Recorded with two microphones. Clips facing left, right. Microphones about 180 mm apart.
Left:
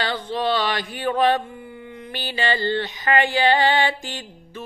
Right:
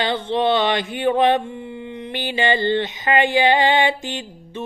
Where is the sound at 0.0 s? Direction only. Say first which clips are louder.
Right 4 dB; 25° right (ahead or behind).